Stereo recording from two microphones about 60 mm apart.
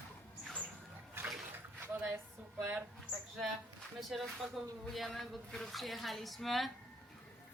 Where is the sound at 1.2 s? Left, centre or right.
Right.